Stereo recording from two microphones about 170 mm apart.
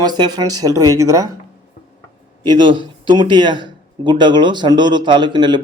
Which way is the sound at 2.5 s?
25° right (ahead or behind).